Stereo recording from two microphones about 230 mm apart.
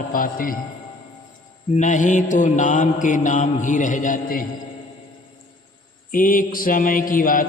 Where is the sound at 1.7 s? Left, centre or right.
Left.